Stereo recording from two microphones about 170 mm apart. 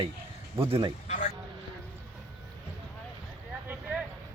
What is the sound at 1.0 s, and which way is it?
Speech, 45° left (ahead or behind).